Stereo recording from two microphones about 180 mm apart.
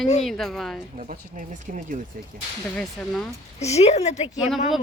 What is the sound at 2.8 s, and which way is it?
Speech, 5° left (ahead or behind).